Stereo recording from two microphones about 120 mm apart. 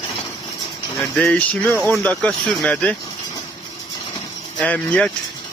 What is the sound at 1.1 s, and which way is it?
Speech, 10° left (ahead or behind).